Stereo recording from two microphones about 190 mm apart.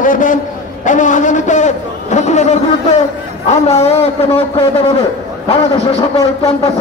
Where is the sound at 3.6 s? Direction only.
35° left (ahead or behind).